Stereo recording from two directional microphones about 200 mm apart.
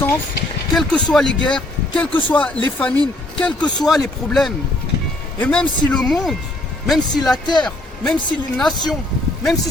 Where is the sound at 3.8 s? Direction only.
Centre (ahead or behind).